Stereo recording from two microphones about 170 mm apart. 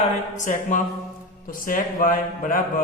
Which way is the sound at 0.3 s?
50° left (ahead or behind).